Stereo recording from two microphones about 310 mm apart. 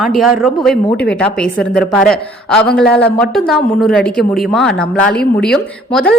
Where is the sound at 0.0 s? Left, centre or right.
Centre.